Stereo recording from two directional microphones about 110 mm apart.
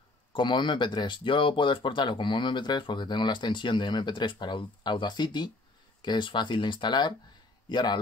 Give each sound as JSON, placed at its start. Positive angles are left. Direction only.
{"t": 0.3, "sound": "a man's voice", "side_deg": 45}